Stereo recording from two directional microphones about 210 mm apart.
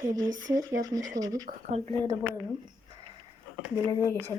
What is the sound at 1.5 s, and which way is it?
Speech, 35° right (ahead or behind).